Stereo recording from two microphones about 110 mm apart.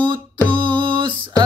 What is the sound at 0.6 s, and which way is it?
Music, 45° right (ahead or behind).